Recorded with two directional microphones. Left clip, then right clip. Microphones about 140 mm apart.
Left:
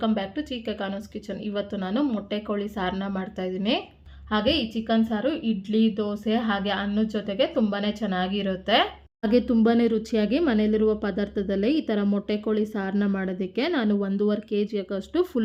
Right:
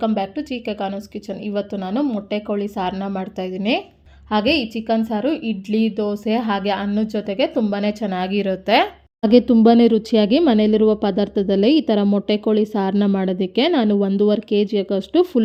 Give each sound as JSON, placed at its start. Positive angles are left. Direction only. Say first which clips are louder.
{"t": 0.0, "sound": "a woman's voice", "louder": "right 6 dB", "side_deg": -30}
{"t": 9.2, "sound": "speech", "louder": "right 8 dB", "side_deg": -20}